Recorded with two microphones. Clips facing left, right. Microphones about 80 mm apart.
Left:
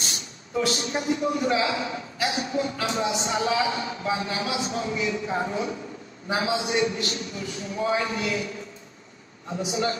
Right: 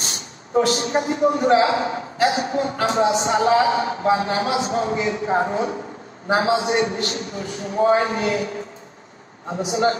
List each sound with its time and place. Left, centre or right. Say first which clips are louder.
0.6 s a man's voice: right 7 dB; right
9.7 s a man's voice: right 7 dB; right